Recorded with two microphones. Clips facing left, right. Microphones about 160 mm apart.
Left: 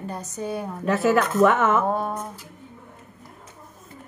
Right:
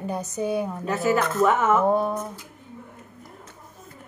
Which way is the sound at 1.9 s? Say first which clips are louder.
Right 4 dB; 10° right (ahead or behind).